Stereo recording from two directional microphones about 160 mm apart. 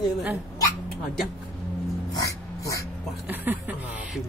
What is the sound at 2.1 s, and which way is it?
Dog, 20° left (ahead or behind).